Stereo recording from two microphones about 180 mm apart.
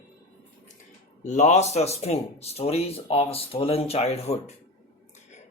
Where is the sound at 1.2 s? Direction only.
40° left (ahead or behind).